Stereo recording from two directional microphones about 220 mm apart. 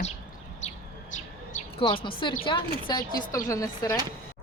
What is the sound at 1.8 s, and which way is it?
A woman's voice, 20° left (ahead or behind).